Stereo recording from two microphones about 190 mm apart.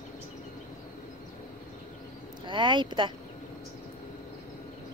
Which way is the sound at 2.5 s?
25° right (ahead or behind).